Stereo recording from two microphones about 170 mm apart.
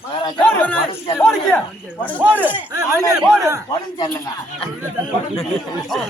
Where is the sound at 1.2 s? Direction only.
5° left (ahead or behind).